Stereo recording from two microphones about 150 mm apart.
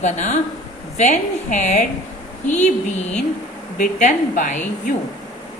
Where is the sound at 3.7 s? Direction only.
60° left (ahead or behind).